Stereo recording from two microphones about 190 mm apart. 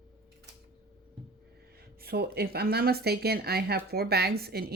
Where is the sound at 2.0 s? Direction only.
55° right (ahead or behind).